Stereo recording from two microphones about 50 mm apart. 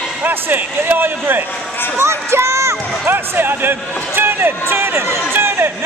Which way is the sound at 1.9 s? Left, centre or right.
Right.